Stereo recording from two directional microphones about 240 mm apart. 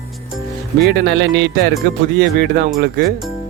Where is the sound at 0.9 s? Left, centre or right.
Right.